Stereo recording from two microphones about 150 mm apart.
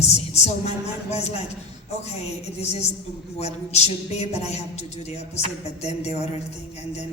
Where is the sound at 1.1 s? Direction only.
45° left (ahead or behind).